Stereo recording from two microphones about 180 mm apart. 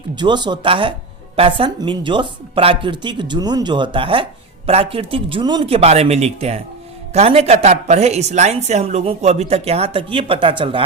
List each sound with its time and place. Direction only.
0.2 s a woman's voice: 25° right (ahead or behind)